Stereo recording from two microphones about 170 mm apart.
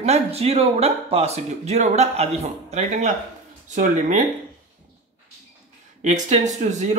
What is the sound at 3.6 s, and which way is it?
Speech, 45° right (ahead or behind).